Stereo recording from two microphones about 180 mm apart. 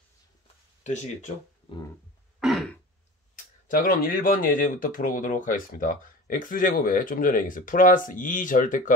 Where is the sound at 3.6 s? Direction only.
55° left (ahead or behind).